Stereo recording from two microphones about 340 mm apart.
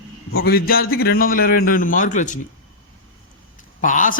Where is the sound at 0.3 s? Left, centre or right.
Left.